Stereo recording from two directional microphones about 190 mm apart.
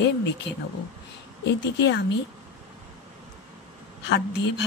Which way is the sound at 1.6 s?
65° left (ahead or behind).